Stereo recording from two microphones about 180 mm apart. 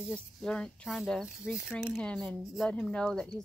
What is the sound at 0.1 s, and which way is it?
Speech, 5° left (ahead or behind).